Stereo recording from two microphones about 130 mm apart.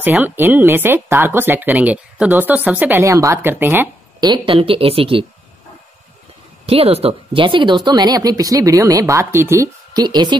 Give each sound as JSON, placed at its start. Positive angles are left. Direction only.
{"t": 0.2, "sound": "speech", "side_deg": -15}
{"t": 4.2, "sound": "a woman's voice", "side_deg": -40}
{"t": 6.6, "sound": "speech", "side_deg": -50}
{"t": 9.9, "sound": "speech", "side_deg": -35}